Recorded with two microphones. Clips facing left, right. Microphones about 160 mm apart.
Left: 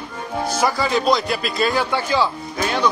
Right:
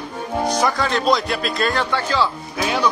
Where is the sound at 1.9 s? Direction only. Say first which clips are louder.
Left 1 dB; 15° left (ahead or behind).